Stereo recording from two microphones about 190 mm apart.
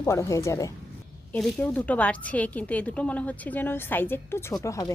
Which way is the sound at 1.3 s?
5° left (ahead or behind).